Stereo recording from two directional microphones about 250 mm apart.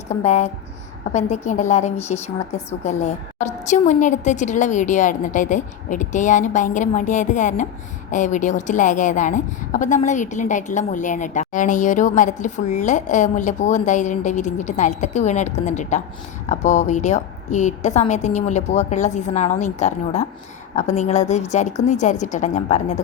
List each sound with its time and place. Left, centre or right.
0.1 s a woman's voice: left